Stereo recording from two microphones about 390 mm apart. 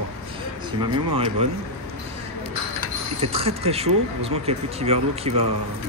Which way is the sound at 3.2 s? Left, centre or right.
Centre.